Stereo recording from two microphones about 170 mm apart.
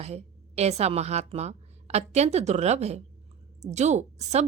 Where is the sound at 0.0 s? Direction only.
40° right (ahead or behind).